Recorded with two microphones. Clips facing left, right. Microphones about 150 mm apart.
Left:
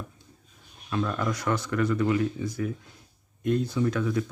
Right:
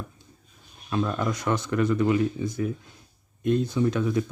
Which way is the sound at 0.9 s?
25° right (ahead or behind).